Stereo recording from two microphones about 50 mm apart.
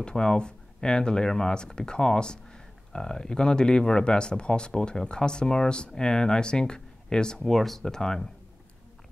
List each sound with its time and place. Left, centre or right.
0.0 s speech: centre
7.4 s speech: centre